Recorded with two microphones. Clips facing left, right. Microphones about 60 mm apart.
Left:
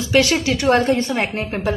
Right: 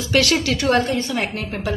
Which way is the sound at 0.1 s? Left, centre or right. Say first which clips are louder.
Left 2 dB; centre.